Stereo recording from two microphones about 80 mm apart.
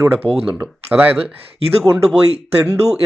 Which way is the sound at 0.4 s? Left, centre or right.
Centre.